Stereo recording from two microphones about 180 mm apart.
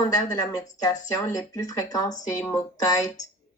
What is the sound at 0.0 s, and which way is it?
A woman's voice, 20° left (ahead or behind).